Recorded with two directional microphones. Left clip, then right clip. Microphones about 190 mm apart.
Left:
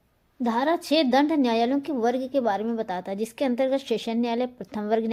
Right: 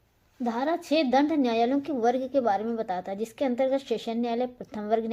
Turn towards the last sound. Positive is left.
turn(degrees=25)  # may be behind; listen again after turning